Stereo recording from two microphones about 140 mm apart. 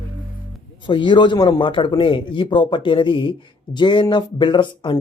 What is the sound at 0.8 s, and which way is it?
Speech, 35° left (ahead or behind).